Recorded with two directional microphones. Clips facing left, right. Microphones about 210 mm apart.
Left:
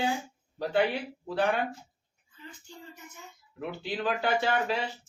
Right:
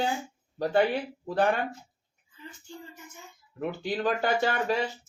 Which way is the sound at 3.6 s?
45° right (ahead or behind).